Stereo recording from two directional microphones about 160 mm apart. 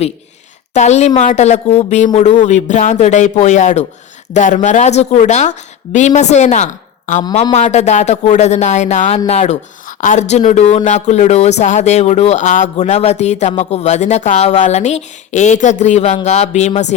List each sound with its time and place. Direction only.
0.7 s speech: 45° left (ahead or behind)